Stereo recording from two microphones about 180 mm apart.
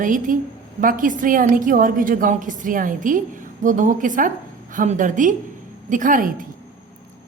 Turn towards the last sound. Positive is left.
turn(degrees=-50)  # may be behind; listen again after turning